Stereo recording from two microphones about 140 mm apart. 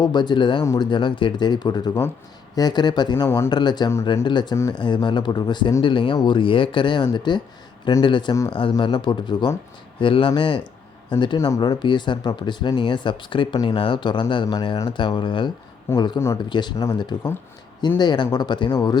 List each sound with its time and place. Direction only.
0.0 s speech: 30° left (ahead or behind)
0.6 s speech: 20° left (ahead or behind)
0.9 s speech: 35° left (ahead or behind)
3.2 s speech: 20° left (ahead or behind)
3.5 s speech: 30° left (ahead or behind)